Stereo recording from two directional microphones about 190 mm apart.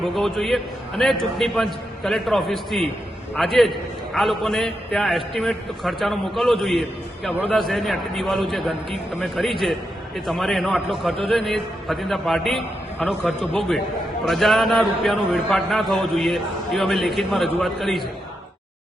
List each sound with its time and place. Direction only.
0.0 s a man's voice: centre (ahead or behind)